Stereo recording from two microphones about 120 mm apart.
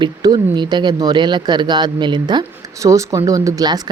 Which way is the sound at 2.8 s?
25° right (ahead or behind).